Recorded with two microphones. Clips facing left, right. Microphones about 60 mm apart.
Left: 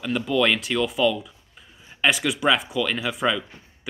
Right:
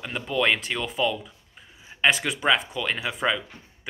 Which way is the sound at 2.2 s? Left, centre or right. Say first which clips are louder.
Left 2 dB; centre.